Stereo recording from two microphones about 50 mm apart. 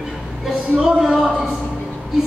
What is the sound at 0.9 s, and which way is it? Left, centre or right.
Speech, centre.